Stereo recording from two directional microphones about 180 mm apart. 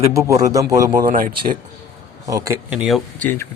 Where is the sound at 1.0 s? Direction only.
50° right (ahead or behind).